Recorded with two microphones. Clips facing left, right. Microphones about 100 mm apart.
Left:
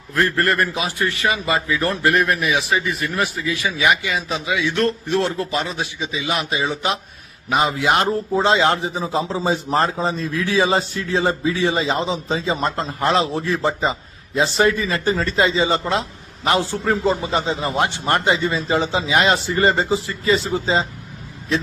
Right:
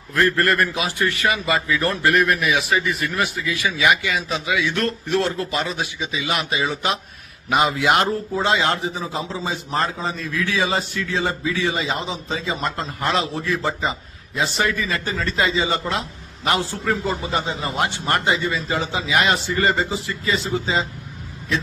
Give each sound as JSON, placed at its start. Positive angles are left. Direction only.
{"t": 0.1, "sound": "a man's voice", "side_deg": 30}
{"t": 7.6, "sound": "a man's voice", "side_deg": 30}